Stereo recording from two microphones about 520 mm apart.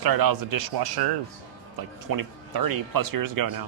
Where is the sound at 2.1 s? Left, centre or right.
Right.